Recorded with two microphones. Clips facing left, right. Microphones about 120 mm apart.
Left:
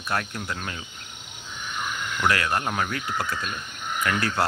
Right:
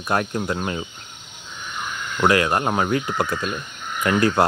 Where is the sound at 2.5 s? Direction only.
35° right (ahead or behind).